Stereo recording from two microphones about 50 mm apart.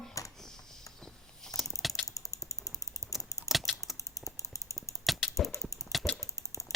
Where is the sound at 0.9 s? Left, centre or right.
Centre.